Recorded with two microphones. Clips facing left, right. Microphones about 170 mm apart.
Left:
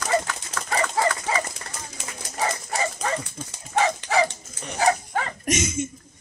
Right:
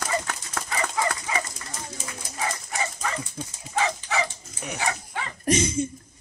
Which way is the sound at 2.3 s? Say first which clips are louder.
Left 4 dB; 35° left (ahead or behind).